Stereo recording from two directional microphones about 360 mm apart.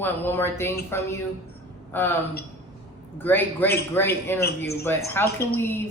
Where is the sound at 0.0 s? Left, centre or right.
Centre.